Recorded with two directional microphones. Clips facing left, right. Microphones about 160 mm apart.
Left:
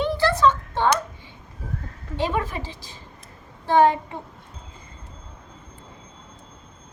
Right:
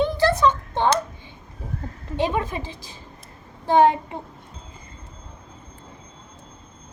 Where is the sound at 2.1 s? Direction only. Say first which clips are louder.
Right 1 dB; 15° right (ahead or behind).